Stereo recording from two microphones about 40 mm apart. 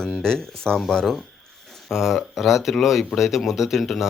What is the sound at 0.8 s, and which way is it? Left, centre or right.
Speech, centre.